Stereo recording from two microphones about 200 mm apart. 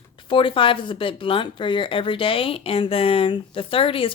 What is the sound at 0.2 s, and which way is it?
Speech, 25° left (ahead or behind).